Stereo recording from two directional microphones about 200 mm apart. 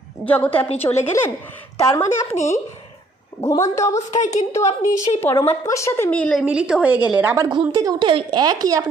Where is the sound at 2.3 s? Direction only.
35° left (ahead or behind).